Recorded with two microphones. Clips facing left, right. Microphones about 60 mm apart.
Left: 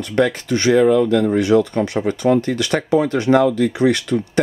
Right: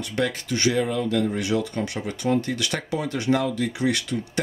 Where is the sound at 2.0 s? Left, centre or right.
Left.